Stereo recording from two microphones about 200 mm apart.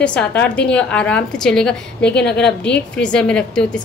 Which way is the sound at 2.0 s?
55° left (ahead or behind).